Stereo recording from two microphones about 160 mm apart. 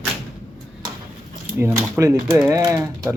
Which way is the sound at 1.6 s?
15° right (ahead or behind).